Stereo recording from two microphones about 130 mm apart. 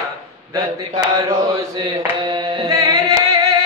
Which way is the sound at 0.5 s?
30° right (ahead or behind).